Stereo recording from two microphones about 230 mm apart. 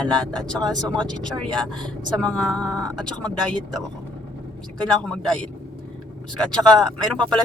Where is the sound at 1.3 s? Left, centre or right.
Centre.